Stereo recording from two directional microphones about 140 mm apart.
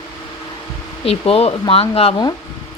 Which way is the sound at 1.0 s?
45° left (ahead or behind).